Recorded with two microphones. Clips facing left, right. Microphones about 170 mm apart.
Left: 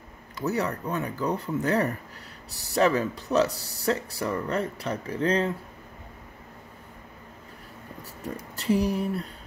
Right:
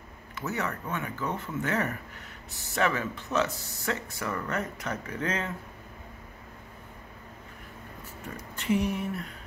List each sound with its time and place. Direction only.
0.5 s speech: 35° left (ahead or behind)
8.5 s speech: 35° left (ahead or behind)